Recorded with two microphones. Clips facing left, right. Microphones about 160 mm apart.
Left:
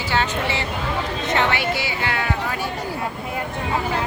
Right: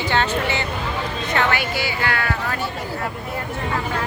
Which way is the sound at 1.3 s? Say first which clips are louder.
Even; 25° left (ahead or behind).